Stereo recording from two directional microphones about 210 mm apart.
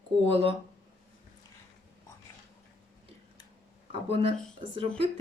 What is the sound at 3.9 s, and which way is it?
Speech, 25° right (ahead or behind).